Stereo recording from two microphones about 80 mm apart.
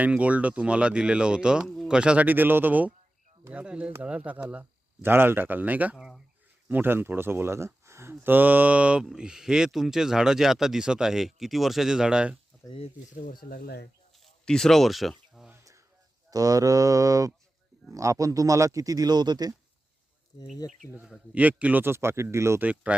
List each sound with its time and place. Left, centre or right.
0.0 s speech: centre
6.0 s speech: centre
6.7 s speech: right
8.2 s speech: right
14.4 s speech: centre
15.4 s a sound: centre
16.3 s a man's voice: right
20.3 s speech: left
21.3 s a man's voice: centre; by 22.6 s right
22.6 s speech: centre